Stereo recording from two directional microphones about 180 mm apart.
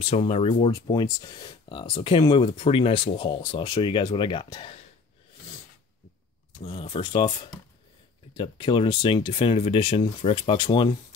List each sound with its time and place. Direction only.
0.0 s speech: 35° left (ahead or behind)
6.6 s speech: 30° left (ahead or behind)
8.4 s speech: 25° left (ahead or behind)